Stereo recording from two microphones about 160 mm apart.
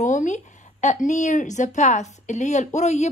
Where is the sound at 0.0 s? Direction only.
50° left (ahead or behind).